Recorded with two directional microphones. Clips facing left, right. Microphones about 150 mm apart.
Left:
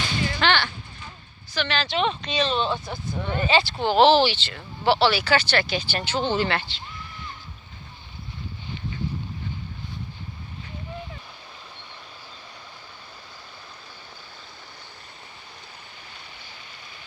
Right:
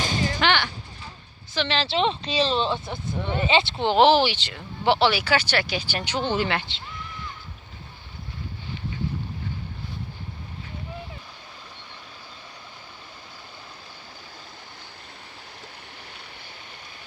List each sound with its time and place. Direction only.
0.0 s whip: 40° right (ahead or behind)
0.3 s whip: 15° right (ahead or behind)
1.5 s speech: 25° right (ahead or behind)